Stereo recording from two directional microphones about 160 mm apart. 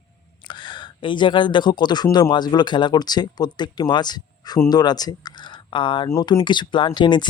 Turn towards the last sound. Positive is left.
turn(degrees=30)  # may be behind; listen again after turning